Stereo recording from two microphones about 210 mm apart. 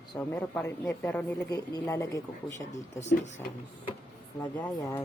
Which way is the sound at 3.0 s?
35° left (ahead or behind).